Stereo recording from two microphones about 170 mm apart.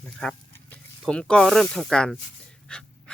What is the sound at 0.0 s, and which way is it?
Speech, 5° left (ahead or behind).